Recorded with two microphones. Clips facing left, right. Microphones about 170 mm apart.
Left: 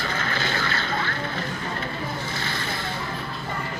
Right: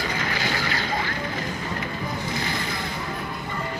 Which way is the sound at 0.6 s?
15° right (ahead or behind).